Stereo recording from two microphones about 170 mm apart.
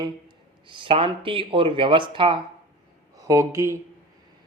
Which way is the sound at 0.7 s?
30° right (ahead or behind).